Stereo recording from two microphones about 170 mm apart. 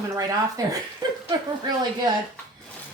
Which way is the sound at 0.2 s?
20° right (ahead or behind).